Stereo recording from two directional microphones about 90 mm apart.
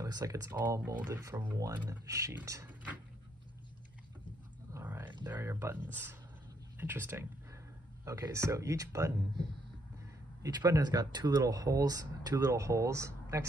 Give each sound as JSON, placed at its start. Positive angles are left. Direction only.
{"t": 0.0, "sound": "speech", "side_deg": -40}
{"t": 0.6, "sound": "speech", "side_deg": -25}
{"t": 1.9, "sound": "speech", "side_deg": -35}
{"t": 2.6, "sound": "a sound", "side_deg": -15}
{"t": 4.8, "sound": "a sound", "side_deg": -20}
{"t": 5.2, "sound": "speech", "side_deg": -25}
{"t": 6.8, "sound": "speech", "side_deg": -25}
{"t": 10.4, "sound": "speech", "side_deg": -45}